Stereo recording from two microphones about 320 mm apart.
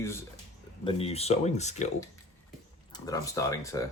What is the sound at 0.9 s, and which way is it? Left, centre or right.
Speech, centre.